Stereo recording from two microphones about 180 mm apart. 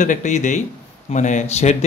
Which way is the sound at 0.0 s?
45° left (ahead or behind).